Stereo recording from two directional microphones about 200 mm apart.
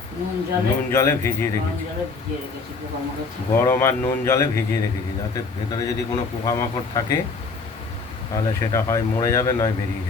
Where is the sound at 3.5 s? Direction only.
10° left (ahead or behind).